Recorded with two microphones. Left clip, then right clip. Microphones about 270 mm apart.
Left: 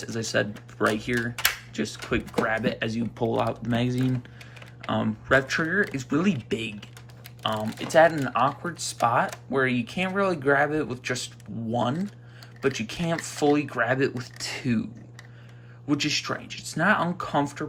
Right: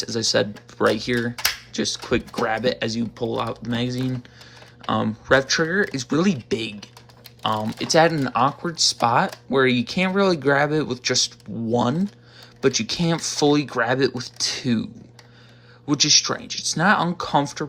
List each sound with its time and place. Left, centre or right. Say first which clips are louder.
0.0 s speech: right 6 dB; centre
12.6 s speech: right 6 dB; centre
15.9 s speech: right 8 dB; centre